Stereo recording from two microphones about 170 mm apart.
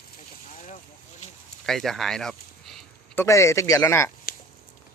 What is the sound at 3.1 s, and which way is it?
A man's voice, 15° left (ahead or behind).